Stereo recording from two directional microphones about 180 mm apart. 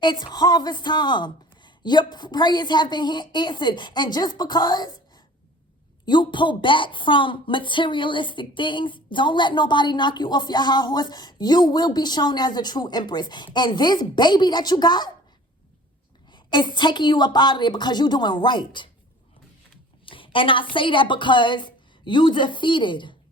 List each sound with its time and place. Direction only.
0.0 s a woman's voice: 25° left (ahead or behind)
16.3 s a woman's voice: 25° left (ahead or behind)
20.1 s a woman's voice: 30° left (ahead or behind)